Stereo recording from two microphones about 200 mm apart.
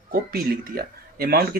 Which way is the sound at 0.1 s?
50° right (ahead or behind).